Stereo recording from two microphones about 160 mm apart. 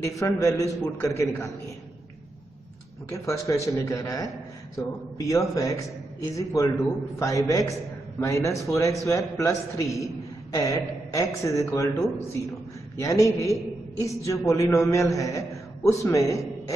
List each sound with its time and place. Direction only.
0.0 s a man's voice: 20° left (ahead or behind)
3.1 s a man's voice: 20° left (ahead or behind)